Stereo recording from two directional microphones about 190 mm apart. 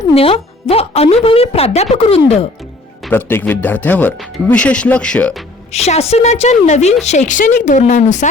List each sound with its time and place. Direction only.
0.1 s a woman's voice: 30° left (ahead or behind)
3.1 s speech: 10° left (ahead or behind)
5.7 s a woman's voice: 35° left (ahead or behind)